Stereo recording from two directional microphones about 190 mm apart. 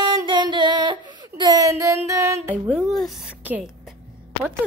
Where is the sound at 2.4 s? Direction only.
5° right (ahead or behind).